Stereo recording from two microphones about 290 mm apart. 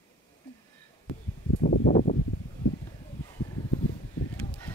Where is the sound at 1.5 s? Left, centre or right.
Left.